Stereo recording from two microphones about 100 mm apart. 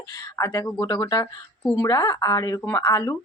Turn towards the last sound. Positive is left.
turn(degrees=40)  # may be behind; listen again after turning